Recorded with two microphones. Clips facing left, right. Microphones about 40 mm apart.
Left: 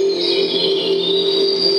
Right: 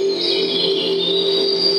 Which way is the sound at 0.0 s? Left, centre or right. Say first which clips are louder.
Left 2 dB; centre.